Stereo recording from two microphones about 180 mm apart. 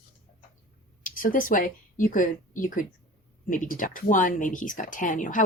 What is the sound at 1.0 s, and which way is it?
Speech, 50° left (ahead or behind).